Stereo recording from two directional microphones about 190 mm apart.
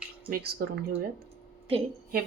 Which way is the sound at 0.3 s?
50° right (ahead or behind).